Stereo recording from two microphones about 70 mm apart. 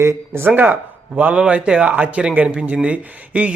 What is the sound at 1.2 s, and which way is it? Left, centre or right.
A man's voice, centre.